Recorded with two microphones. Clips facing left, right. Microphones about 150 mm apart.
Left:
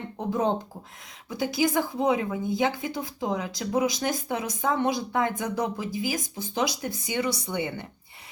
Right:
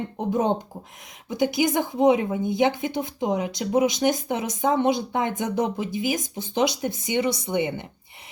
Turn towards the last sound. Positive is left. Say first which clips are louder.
# right 5 dB
turn(degrees=-20)  # may be behind; listen again after turning